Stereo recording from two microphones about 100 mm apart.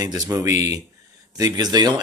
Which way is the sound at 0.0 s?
40° right (ahead or behind).